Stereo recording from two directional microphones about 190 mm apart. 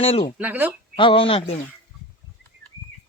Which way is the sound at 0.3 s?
10° right (ahead or behind).